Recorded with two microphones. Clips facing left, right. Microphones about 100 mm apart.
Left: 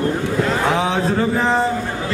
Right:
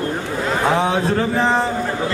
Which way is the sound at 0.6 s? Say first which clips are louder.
Right 1 dB; centre (ahead or behind).